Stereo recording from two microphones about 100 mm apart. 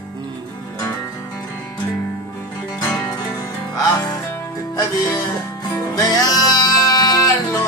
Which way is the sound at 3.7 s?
35° left (ahead or behind).